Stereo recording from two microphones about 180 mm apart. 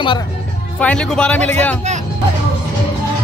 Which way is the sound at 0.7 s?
5° left (ahead or behind).